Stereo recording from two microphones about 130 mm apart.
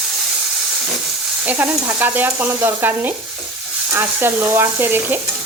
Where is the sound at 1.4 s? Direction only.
15° right (ahead or behind).